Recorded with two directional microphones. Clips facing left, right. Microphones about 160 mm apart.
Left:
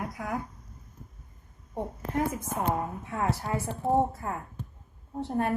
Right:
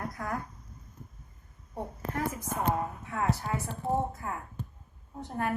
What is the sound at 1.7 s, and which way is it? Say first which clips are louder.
A woman's voice: left 4 dB; 25° left (ahead or behind).